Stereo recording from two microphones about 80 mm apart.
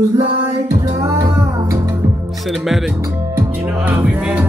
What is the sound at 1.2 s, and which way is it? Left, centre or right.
Music, right.